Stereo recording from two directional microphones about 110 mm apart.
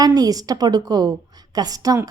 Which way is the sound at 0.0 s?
35° right (ahead or behind).